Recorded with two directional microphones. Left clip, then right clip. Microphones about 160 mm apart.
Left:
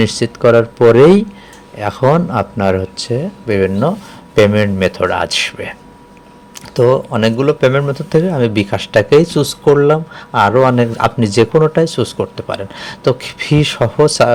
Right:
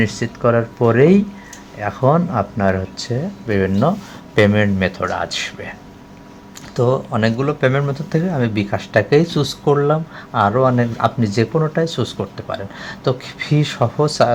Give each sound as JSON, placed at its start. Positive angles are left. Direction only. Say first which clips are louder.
{"t": 0.0, "sound": "speech", "louder": "left 6 dB", "side_deg": 20}
{"t": 1.8, "sound": "speech", "louder": "left 4 dB", "side_deg": 15}
{"t": 6.7, "sound": "speech", "louder": "left 6 dB", "side_deg": 15}